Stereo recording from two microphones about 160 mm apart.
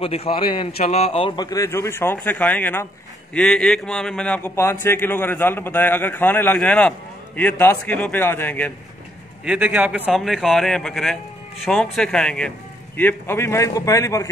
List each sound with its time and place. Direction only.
0.0 s a man's voice: 35° left (ahead or behind)
0.8 s a man's voice: 40° left (ahead or behind); by 8.7 s 10° left (ahead or behind)
9.4 s a man's voice: 10° right (ahead or behind); by 14.2 s 20° left (ahead or behind)